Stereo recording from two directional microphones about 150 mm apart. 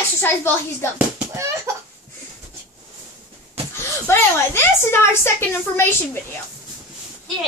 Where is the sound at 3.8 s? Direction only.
15° left (ahead or behind).